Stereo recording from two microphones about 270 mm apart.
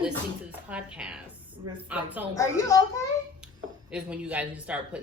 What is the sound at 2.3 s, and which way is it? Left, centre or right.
Speech, centre.